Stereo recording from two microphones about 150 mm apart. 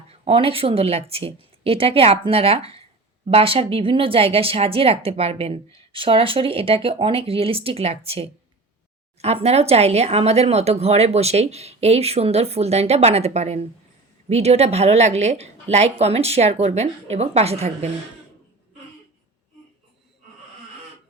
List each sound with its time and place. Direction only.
0.1 s speech: 40° right (ahead or behind)